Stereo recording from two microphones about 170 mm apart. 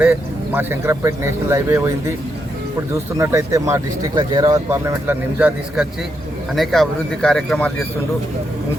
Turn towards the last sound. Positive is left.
turn(degrees=5)  # may be behind; listen again after turning